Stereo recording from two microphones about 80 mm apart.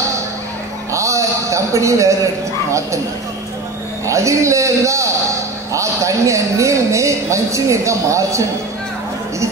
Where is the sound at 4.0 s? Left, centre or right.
Right.